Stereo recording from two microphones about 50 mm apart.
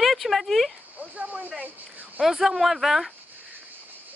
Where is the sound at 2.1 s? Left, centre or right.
Centre.